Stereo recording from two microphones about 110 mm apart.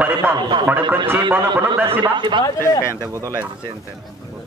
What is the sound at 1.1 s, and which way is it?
Speech, 20° right (ahead or behind).